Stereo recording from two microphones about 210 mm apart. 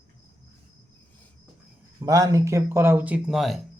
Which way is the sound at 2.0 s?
15° right (ahead or behind).